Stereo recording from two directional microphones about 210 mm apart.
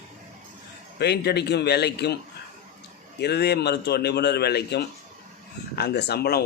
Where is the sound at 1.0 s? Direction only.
50° left (ahead or behind).